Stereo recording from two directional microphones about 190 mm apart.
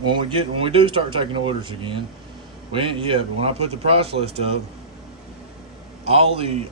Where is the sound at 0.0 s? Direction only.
25° right (ahead or behind).